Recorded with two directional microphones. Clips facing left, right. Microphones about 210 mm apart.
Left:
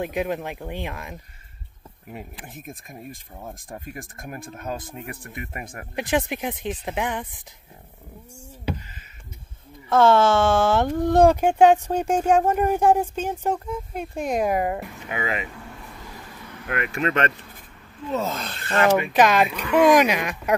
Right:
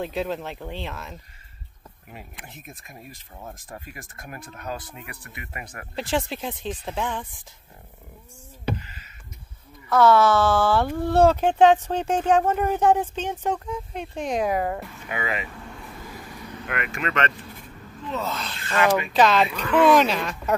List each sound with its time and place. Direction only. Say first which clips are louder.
0.0 s speech: left 2 dB; 15° left (ahead or behind)
2.1 s speech: left 5 dB; 50° left (ahead or behind)
5.9 s speech: left 2 dB; 15° left (ahead or behind)
9.8 s speech: left 1 dB; 25° left (ahead or behind)
16.8 s speech: left 4 dB; 35° left (ahead or behind)
18.1 s speech: left 3 dB; 45° left (ahead or behind)
18.9 s speech: left 1 dB; 20° left (ahead or behind)